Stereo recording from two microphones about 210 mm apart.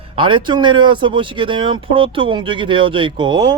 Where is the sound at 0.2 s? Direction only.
20° right (ahead or behind).